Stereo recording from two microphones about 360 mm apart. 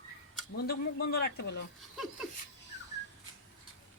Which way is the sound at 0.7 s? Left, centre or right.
Left.